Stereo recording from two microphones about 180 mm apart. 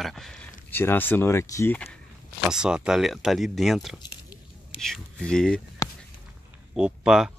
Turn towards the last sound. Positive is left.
turn(degrees=-5)  # may be behind; listen again after turning